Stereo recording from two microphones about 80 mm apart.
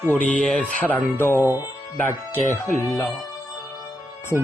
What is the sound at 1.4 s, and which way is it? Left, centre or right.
Speech, right.